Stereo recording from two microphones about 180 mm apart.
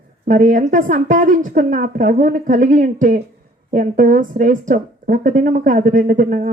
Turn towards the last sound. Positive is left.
turn(degrees=-50)  # may be behind; listen again after turning